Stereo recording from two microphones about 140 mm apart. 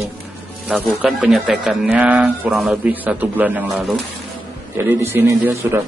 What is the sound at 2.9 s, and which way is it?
Speech, 10° right (ahead or behind).